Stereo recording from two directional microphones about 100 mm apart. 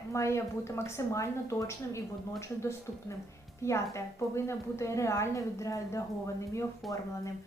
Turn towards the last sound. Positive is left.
turn(degrees=0)  # may be behind; listen again after turning